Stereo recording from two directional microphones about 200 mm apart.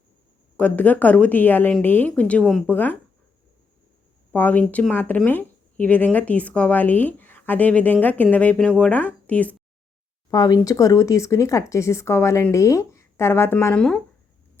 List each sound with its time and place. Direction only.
0.5 s speech: 5° left (ahead or behind)
4.3 s speech: 5° left (ahead or behind)
10.3 s speech: 20° left (ahead or behind)